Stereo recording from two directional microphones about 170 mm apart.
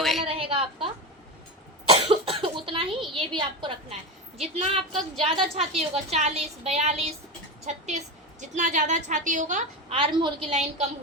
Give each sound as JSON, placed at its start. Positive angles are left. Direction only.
{"t": 0.0, "sound": "a sound", "side_deg": 0}
{"t": 0.3, "sound": "a sound", "side_deg": -35}
{"t": 1.9, "sound": "cough", "side_deg": -35}
{"t": 3.2, "sound": "a woman's voice", "side_deg": -30}
{"t": 4.9, "sound": "a woman's voice", "side_deg": 0}
{"t": 5.5, "sound": "a woman's voice", "side_deg": -35}
{"t": 9.9, "sound": "a woman's voice", "side_deg": -30}
{"t": 10.5, "sound": "a woman's voice", "side_deg": -40}